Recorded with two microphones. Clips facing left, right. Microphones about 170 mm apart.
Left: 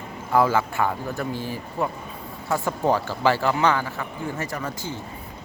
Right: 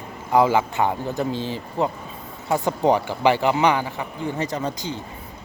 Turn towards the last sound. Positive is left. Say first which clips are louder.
# right 4 dB
turn(degrees=-20)  # may be behind; listen again after turning